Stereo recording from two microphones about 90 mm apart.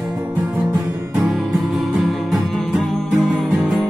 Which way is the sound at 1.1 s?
5° right (ahead or behind).